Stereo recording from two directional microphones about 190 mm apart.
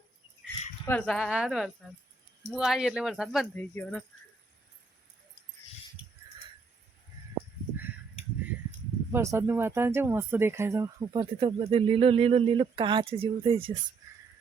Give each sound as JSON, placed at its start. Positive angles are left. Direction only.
{"t": 0.9, "sound": "speech", "side_deg": 5}
{"t": 3.5, "sound": "speech", "side_deg": 10}
{"t": 9.1, "sound": "speech", "side_deg": -15}